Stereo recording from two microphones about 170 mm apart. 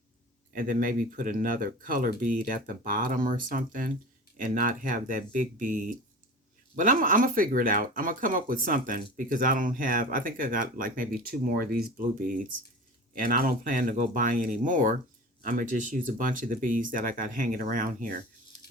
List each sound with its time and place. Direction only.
0.5 s speech: 55° right (ahead or behind)